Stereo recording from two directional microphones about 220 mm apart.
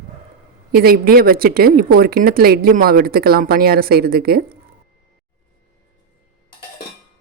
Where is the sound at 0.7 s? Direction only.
40° right (ahead or behind).